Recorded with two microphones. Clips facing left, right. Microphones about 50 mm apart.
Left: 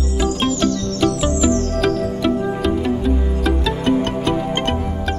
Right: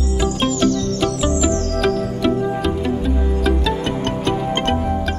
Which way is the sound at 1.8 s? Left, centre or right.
Centre.